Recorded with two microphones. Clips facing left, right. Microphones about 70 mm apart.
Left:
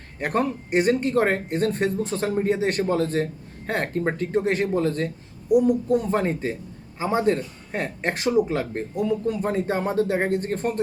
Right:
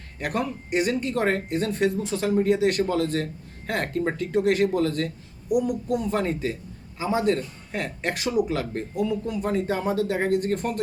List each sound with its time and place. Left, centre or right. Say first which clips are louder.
0.2 s speech: left 4 dB; left